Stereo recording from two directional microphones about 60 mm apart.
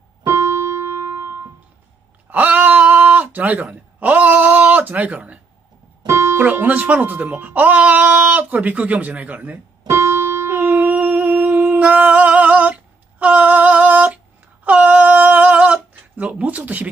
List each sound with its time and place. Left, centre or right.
0.2 s keyboard: right
2.2 s a sound: right
6.0 s music: right
6.4 s speech: right
9.8 s music: right